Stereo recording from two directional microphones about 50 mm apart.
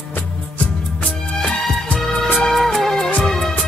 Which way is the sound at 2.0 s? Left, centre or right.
Centre.